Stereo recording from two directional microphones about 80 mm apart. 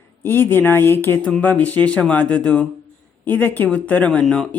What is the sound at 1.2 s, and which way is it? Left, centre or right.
Speech, centre.